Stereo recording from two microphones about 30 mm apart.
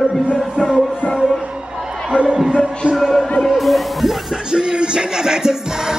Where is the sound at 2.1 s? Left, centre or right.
Right.